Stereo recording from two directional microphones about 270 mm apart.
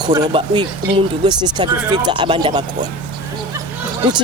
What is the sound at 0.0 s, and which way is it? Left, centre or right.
Speech, centre.